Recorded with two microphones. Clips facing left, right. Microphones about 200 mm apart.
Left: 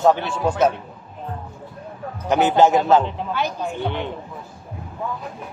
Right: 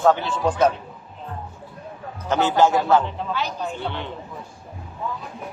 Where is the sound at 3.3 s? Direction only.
50° left (ahead or behind).